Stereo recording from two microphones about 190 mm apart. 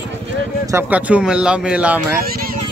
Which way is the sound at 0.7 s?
10° right (ahead or behind).